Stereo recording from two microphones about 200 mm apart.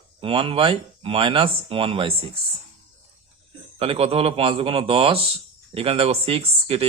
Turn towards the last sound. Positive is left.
turn(degrees=-30)  # may be behind; listen again after turning